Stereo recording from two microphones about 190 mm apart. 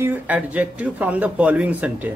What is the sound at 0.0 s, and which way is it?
Speech, 10° right (ahead or behind).